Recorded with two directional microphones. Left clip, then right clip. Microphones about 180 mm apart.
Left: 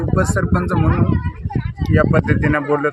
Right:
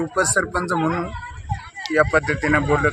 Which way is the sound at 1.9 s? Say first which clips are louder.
Left 1 dB; 30° left (ahead or behind).